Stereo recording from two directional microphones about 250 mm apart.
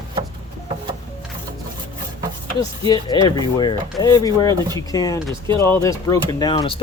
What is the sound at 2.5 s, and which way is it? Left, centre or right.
Speech, centre.